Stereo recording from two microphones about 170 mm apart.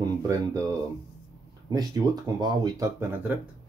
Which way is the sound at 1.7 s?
20° right (ahead or behind).